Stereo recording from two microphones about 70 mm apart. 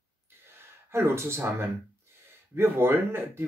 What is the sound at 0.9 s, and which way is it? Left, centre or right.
Speech, right.